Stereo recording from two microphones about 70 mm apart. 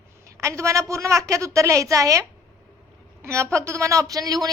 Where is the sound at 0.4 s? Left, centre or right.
Right.